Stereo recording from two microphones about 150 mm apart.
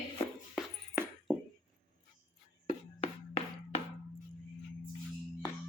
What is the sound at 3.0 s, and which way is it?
Music, 45° left (ahead or behind).